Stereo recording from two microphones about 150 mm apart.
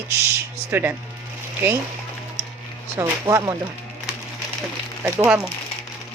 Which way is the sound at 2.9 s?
20° right (ahead or behind).